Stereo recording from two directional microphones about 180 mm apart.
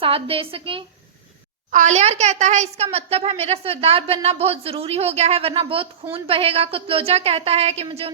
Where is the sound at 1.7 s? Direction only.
40° right (ahead or behind).